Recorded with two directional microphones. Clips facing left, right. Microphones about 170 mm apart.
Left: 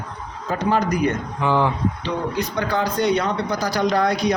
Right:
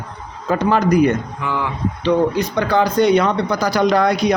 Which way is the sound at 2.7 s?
75° right (ahead or behind).